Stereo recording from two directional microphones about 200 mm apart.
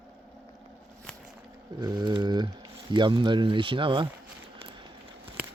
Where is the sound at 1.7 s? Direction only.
20° right (ahead or behind).